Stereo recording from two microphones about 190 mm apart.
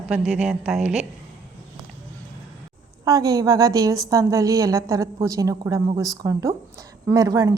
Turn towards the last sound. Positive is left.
turn(degrees=-20)  # may be behind; listen again after turning